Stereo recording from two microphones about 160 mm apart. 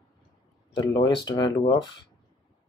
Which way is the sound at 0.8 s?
25° left (ahead or behind).